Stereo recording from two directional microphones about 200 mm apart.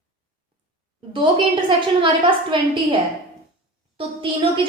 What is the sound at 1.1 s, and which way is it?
A woman's voice, 25° right (ahead or behind).